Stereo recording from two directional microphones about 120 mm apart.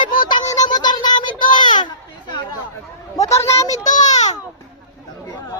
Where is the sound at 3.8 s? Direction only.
90° left.